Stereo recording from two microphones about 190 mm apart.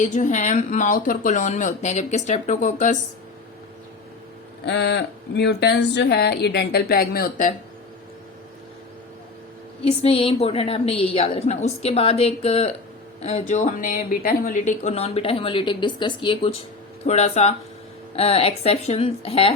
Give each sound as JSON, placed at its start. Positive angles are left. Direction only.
{"t": 0.0, "sound": "speech", "side_deg": 40}
{"t": 4.6, "sound": "speech", "side_deg": 65}
{"t": 9.8, "sound": "speech", "side_deg": 30}